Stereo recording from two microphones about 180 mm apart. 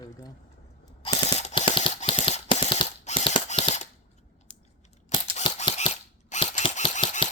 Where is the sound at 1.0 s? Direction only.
35° left (ahead or behind).